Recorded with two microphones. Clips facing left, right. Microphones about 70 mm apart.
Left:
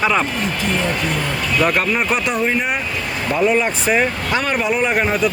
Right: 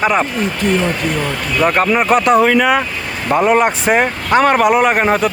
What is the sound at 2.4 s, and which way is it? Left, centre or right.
Speech, right.